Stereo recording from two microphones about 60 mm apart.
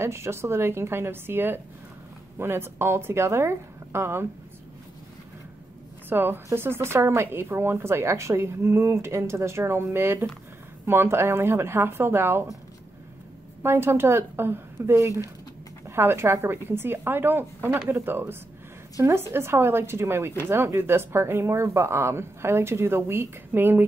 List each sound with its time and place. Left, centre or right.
0.0 s a woman's voice: right
6.0 s a woman's voice: right
13.6 s a woman's voice: right